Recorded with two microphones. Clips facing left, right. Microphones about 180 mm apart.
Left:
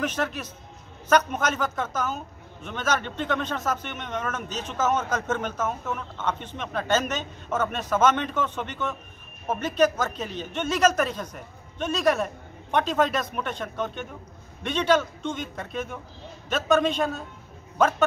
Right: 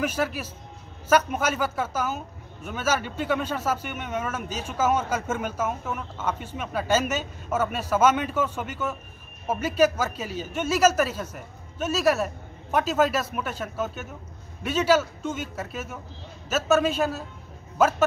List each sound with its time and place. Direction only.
0.0 s a man's voice: 10° right (ahead or behind)